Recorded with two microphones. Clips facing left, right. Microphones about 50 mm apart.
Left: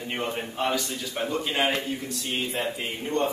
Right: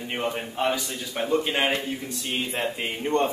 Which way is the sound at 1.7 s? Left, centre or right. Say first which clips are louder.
Right 1 dB; centre.